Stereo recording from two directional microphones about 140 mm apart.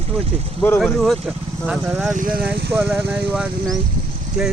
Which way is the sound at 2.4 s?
15° right (ahead or behind).